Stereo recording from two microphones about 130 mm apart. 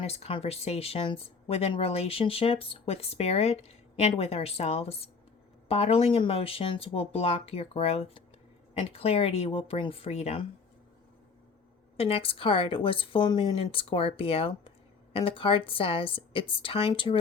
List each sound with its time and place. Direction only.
0.0 s speech: 50° left (ahead or behind)
11.9 s speech: 50° left (ahead or behind)